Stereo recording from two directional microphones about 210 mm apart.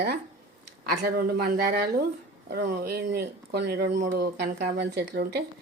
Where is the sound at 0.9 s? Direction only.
45° right (ahead or behind).